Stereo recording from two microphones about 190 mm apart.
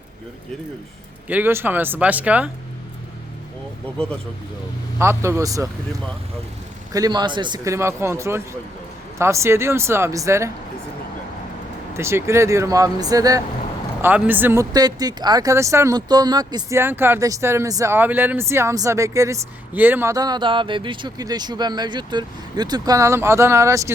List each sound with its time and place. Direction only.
1.3 s speech: 10° right (ahead or behind)
4.9 s speech: 15° right (ahead or behind)
6.9 s speech: 20° right (ahead or behind)
11.9 s speech: 15° right (ahead or behind)